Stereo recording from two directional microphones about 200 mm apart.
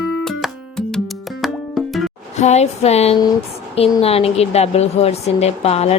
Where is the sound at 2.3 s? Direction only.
35° left (ahead or behind).